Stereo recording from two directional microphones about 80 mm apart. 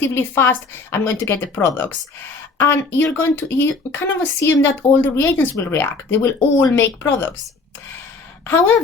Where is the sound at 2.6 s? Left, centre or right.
Left.